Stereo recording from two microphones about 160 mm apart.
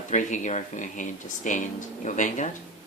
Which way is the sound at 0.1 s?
50° left (ahead or behind).